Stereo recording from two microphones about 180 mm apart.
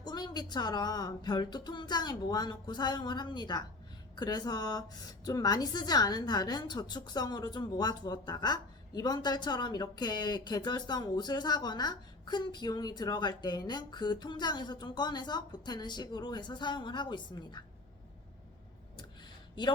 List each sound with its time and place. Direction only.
0.0 s a woman's voice: 25° left (ahead or behind)